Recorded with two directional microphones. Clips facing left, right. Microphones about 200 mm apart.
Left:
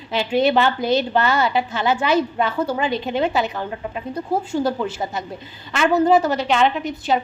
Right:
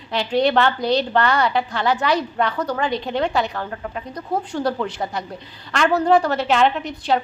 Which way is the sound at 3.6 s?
15° left (ahead or behind).